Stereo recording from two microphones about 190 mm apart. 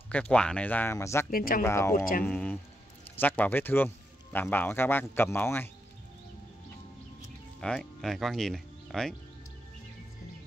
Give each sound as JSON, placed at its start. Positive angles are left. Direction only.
{"t": 0.1, "sound": "a man's voice", "side_deg": 5}
{"t": 1.3, "sound": "speech", "side_deg": 50}
{"t": 1.6, "sound": "a man's voice", "side_deg": 15}
{"t": 7.6, "sound": "speech", "side_deg": 5}